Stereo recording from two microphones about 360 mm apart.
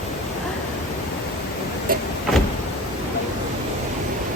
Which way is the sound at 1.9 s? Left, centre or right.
Right.